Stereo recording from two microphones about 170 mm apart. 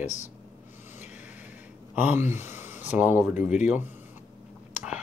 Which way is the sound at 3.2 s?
10° right (ahead or behind).